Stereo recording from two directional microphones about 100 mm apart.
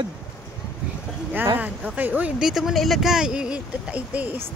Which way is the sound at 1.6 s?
15° right (ahead or behind).